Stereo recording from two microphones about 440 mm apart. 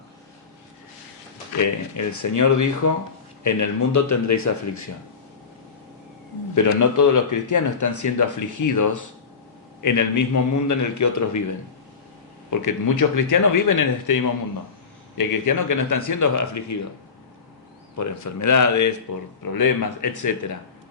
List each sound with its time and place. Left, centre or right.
1.5 s speech: left
6.5 s speech: left
12.5 s speech: left
15.2 s speech: left
17.9 s speech: left